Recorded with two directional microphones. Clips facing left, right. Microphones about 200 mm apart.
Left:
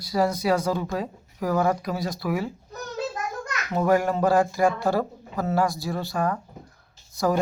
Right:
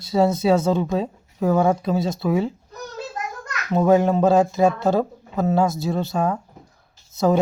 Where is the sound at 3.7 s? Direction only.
20° right (ahead or behind).